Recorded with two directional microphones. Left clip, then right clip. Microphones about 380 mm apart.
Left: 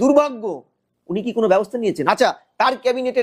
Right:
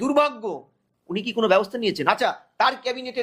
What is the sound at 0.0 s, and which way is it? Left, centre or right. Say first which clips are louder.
Speech: left 5 dB; left.